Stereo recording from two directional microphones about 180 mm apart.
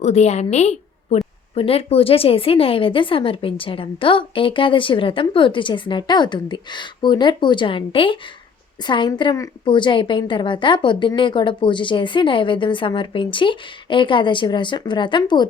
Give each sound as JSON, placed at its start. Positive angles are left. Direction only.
{"t": 0.0, "sound": "a woman's voice", "side_deg": 40}